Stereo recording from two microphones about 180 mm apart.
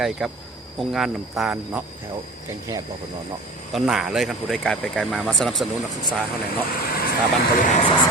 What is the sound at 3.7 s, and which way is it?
Speech, centre (ahead or behind).